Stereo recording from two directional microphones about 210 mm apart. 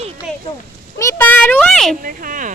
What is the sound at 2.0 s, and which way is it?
Speech, 40° right (ahead or behind).